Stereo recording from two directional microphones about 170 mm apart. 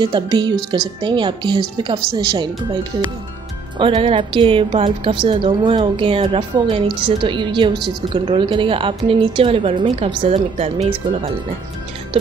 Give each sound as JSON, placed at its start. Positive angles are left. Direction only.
{"t": 0.0, "sound": "a woman's voice", "side_deg": -25}